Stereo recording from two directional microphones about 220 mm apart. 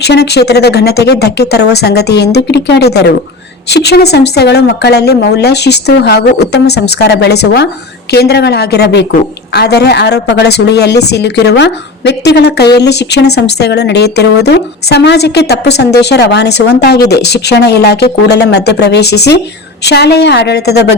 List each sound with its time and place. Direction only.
0.0 s speech: 50° left (ahead or behind)